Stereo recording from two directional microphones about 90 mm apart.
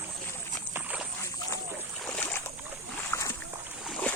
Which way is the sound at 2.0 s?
15° left (ahead or behind).